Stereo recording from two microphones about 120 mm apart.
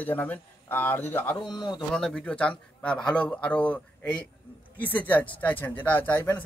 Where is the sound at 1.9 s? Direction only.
5° left (ahead or behind).